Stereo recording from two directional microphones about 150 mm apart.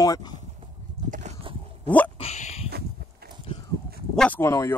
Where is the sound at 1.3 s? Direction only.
50° right (ahead or behind).